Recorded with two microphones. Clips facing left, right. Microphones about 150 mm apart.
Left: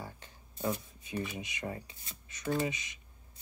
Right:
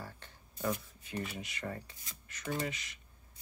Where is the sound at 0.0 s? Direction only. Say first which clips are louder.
Left 2 dB; 20° left (ahead or behind).